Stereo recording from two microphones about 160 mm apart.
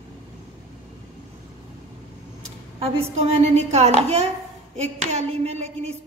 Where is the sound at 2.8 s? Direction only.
40° right (ahead or behind).